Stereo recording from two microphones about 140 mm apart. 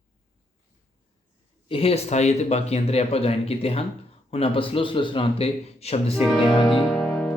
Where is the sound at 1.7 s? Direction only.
45° left (ahead or behind).